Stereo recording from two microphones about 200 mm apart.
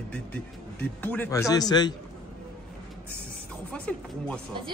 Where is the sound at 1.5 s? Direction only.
20° left (ahead or behind).